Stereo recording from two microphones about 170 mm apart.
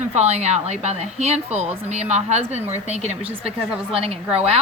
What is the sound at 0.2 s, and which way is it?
A woman's voice, 40° right (ahead or behind).